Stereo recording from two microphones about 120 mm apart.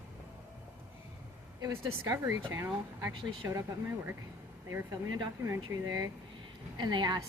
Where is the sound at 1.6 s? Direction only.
25° right (ahead or behind).